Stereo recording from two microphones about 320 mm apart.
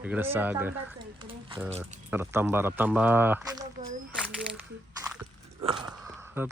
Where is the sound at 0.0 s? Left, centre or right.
Centre.